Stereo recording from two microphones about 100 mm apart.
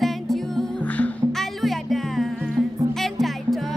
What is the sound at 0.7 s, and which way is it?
Music, 15° left (ahead or behind).